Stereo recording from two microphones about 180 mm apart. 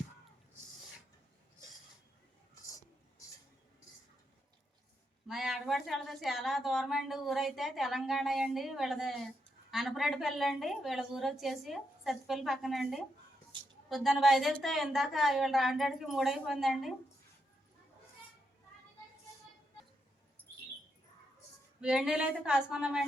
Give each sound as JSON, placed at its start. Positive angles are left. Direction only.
{"t": 5.3, "sound": "a woman's voice", "side_deg": 0}
{"t": 21.8, "sound": "a woman's voice", "side_deg": -5}